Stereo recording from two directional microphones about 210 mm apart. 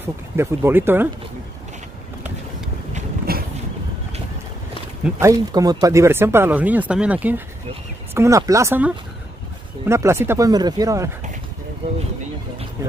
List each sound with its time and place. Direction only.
0.4 s speech: 10° right (ahead or behind)
2.9 s a sound: 45° right (ahead or behind)
5.2 s speech: 15° right (ahead or behind)